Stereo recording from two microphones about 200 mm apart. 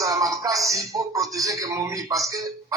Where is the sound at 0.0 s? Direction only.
15° right (ahead or behind).